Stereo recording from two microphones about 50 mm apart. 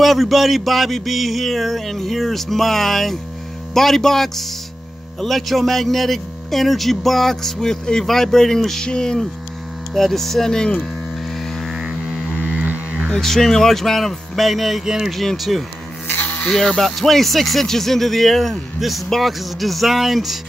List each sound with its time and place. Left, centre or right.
0.0 s speech: centre
11.6 s music: centre
12.5 s a sound: right
13.1 s speech: centre
14.9 s speech: centre
15.1 s speech: centre
16.1 s a sound: left
16.4 s speech: centre